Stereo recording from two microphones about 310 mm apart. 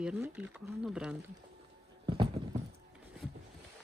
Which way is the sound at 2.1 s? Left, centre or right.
Centre.